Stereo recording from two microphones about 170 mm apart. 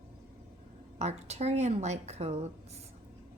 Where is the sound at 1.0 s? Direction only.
40° right (ahead or behind).